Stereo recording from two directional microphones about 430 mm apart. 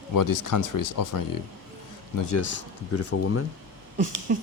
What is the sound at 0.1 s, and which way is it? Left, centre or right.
Speech, left.